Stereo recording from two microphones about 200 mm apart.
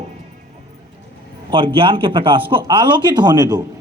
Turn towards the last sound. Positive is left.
turn(degrees=-20)  # may be behind; listen again after turning